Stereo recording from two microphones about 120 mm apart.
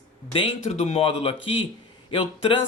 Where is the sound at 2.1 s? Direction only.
45° left (ahead or behind).